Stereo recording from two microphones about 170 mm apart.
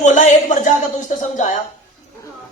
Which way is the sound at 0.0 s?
45° left (ahead or behind).